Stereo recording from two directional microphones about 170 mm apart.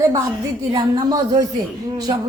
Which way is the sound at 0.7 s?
20° right (ahead or behind).